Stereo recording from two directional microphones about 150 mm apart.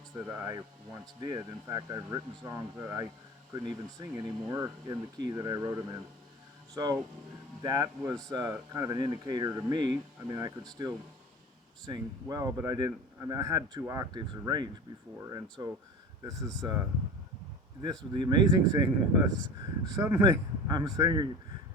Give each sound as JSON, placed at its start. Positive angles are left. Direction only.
{"t": 0.3, "sound": "speech", "side_deg": -20}
{"t": 7.6, "sound": "speech", "side_deg": -25}
{"t": 18.1, "sound": "speech", "side_deg": -30}